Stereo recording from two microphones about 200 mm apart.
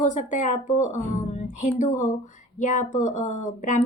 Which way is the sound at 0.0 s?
40° left (ahead or behind).